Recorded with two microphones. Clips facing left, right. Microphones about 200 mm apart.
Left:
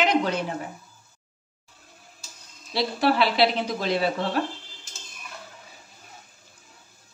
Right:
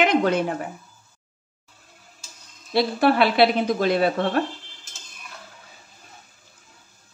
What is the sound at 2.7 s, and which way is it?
Speech, 55° right (ahead or behind).